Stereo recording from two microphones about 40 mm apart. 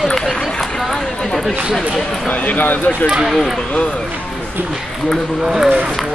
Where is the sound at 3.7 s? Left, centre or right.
Left.